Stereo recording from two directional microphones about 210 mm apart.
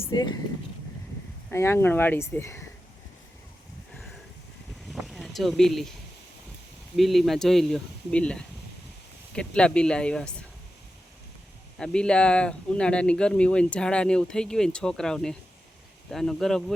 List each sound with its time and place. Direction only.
0.0 s speech: 20° left (ahead or behind)
1.5 s speech: 10° left (ahead or behind)
4.9 s a sound: centre (ahead or behind)
6.9 s speech: centre (ahead or behind)
11.8 s speech: 5° left (ahead or behind)